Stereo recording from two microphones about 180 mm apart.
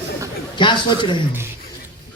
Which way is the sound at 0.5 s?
25° left (ahead or behind).